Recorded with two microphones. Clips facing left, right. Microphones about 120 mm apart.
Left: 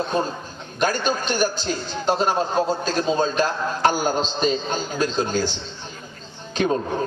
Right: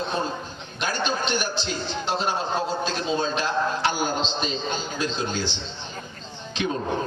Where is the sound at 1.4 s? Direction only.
45° left (ahead or behind).